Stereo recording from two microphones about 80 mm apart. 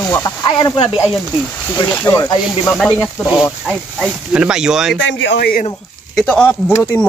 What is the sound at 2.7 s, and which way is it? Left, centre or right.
Speech, centre.